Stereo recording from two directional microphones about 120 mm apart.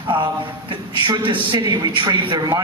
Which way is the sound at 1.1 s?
45° right (ahead or behind).